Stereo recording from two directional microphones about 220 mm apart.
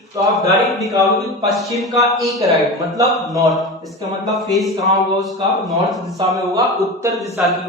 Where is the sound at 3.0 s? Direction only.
15° right (ahead or behind).